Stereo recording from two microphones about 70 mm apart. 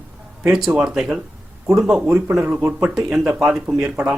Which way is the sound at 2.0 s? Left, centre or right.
Right.